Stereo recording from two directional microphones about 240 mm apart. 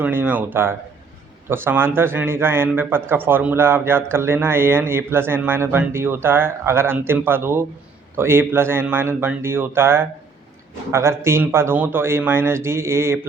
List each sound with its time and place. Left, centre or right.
0.0 s speech: centre